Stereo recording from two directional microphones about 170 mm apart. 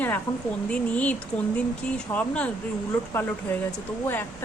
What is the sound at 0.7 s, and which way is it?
Speech, 10° left (ahead or behind).